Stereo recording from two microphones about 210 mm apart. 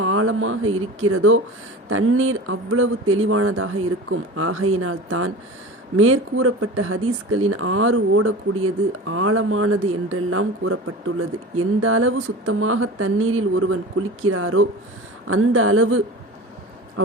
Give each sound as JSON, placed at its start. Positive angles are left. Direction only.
{"t": 0.0, "sound": "speech", "side_deg": -85}